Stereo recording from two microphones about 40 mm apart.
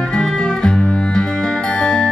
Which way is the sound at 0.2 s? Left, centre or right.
Centre.